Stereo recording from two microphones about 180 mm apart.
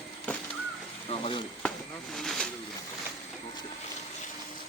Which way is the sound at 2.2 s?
Centre (ahead or behind).